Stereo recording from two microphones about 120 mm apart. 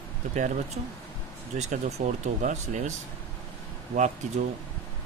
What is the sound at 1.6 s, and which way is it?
Speech, 70° right (ahead or behind).